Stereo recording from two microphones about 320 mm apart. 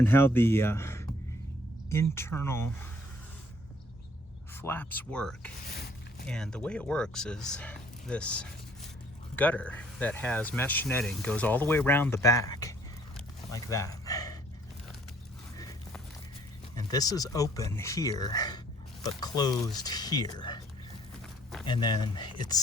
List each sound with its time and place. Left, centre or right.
0.0 s speech: centre
4.5 s speech: centre
5.6 s speech: left
6.2 s speech: centre
13.1 s a sound: centre
15.5 s a sound: centre
16.7 s speech: centre
21.7 s speech: centre